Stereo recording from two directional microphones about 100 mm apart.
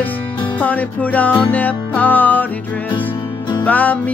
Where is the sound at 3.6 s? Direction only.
15° left (ahead or behind).